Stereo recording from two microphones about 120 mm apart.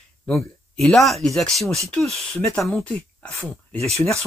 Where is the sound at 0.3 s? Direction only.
Centre (ahead or behind).